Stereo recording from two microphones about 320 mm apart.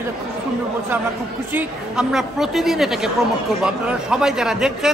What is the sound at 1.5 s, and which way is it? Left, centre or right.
A woman's voice, centre.